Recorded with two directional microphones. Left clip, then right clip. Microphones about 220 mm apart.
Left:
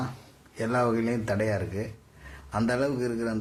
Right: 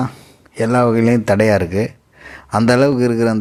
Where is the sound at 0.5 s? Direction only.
40° right (ahead or behind).